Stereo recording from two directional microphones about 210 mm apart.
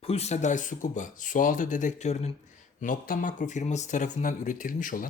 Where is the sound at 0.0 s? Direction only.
30° left (ahead or behind).